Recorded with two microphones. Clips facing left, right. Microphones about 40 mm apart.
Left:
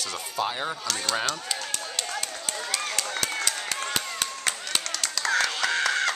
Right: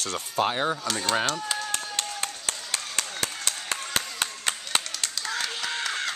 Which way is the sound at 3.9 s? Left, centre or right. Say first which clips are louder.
Even; right.